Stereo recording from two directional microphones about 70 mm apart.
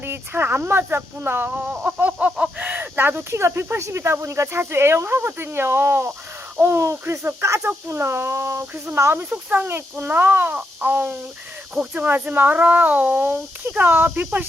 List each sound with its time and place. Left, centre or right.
0.0 s speech: right
9.5 s speech: right